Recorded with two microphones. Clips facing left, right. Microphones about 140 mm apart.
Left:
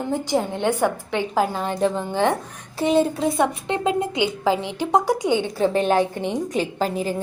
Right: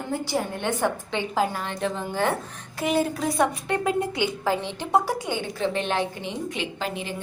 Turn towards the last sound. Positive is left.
turn(degrees=40)  # may be behind; listen again after turning